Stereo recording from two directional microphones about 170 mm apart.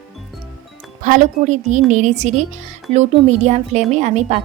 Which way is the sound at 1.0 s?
45° right (ahead or behind).